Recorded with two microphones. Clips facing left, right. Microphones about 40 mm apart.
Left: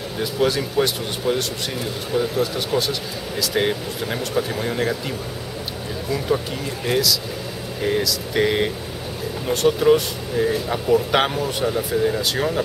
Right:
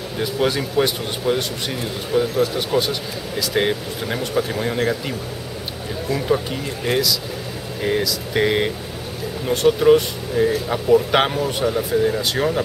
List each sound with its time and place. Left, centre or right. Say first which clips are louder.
0.2 s speech: even; centre